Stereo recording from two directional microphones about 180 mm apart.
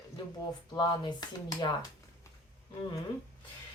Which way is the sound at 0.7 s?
25° left (ahead or behind).